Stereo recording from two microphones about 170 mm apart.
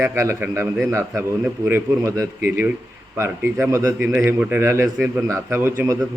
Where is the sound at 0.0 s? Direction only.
15° right (ahead or behind).